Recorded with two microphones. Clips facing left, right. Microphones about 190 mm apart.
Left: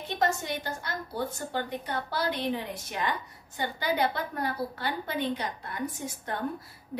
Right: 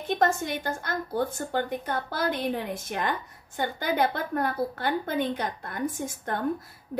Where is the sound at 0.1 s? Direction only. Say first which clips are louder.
Right 4 dB; 50° right (ahead or behind).